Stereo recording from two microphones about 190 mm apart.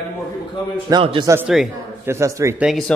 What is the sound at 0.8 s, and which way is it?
Speech, 25° right (ahead or behind).